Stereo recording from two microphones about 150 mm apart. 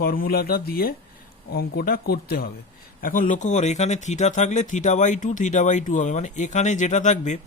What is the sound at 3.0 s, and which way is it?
Speech, 60° left (ahead or behind).